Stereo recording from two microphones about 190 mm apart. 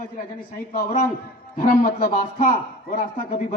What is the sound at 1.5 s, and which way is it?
Speech, 50° left (ahead or behind).